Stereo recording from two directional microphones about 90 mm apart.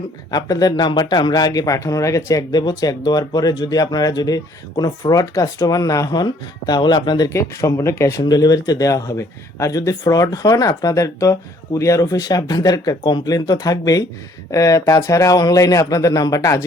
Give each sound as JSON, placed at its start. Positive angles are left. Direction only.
{"t": 0.3, "sound": "speech", "side_deg": 45}
{"t": 7.3, "sound": "speech", "side_deg": 35}
{"t": 8.2, "sound": "speech", "side_deg": 45}